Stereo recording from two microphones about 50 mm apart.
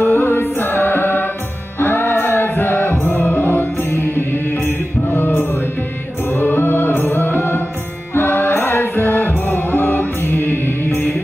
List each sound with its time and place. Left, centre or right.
0.0 s music: left